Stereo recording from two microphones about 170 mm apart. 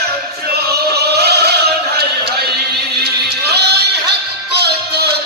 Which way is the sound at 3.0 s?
75° right (ahead or behind).